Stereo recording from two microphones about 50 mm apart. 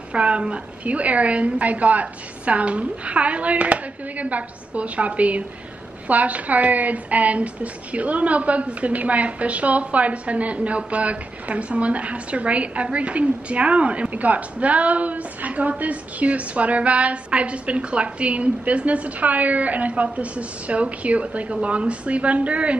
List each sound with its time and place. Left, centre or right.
0.1 s a woman's voice: right